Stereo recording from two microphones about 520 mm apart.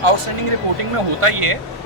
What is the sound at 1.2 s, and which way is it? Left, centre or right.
Speech, right.